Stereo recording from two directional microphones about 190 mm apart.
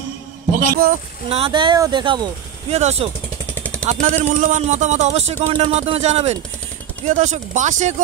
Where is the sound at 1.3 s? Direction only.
30° right (ahead or behind).